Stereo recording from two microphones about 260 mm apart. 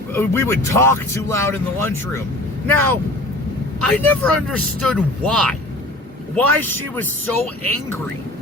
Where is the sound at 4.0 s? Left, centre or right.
Centre.